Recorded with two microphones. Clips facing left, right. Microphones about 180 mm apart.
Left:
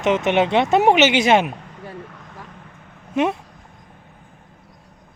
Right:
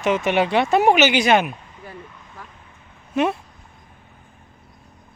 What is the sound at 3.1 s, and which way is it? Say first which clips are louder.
Speech: left 1 dB; 20° left (ahead or behind).